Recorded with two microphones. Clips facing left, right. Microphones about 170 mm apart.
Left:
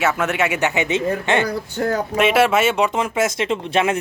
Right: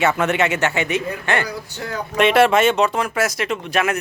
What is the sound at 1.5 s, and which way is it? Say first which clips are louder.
Speech: left 7 dB; 55° left (ahead or behind).